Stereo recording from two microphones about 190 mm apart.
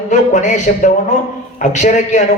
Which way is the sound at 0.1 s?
40° left (ahead or behind).